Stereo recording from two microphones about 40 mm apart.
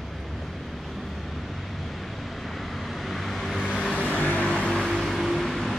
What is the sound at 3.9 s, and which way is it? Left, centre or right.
Vehicle, left.